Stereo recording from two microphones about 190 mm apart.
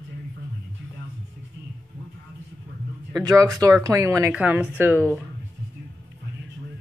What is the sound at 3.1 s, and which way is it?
Speech, 20° right (ahead or behind).